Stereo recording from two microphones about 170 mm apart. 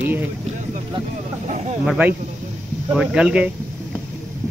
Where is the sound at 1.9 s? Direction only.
10° right (ahead or behind).